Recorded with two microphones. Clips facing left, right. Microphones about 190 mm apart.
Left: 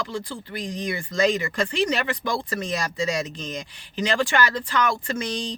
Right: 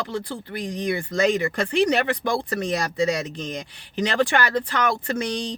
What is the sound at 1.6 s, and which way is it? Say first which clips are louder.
Speech: right 3 dB; 60° right (ahead or behind).